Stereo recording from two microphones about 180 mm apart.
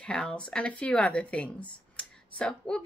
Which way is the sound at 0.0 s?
5° left (ahead or behind).